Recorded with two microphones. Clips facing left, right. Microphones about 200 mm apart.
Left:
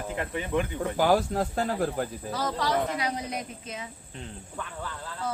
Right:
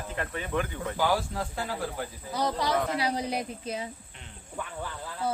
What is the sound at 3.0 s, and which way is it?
Speech, 30° right (ahead or behind).